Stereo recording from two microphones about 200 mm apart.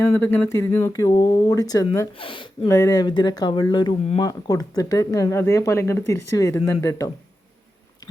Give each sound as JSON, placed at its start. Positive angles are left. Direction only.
{"t": 0.0, "sound": "speech", "side_deg": 10}